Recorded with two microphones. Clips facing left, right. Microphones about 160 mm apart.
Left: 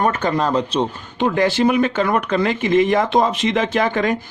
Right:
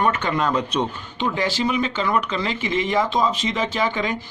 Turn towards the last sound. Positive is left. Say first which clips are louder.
# left 5 dB
turn(degrees=55)  # may be behind; listen again after turning